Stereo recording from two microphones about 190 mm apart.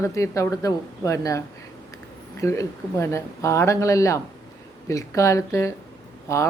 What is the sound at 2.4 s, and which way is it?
Speech, 15° left (ahead or behind).